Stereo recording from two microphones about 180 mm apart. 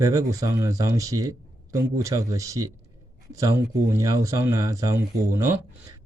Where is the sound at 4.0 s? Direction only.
20° right (ahead or behind).